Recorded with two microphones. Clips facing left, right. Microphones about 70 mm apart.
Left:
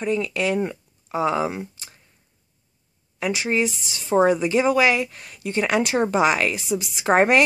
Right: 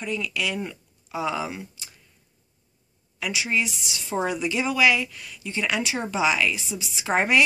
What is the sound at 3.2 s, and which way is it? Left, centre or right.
Speech, left.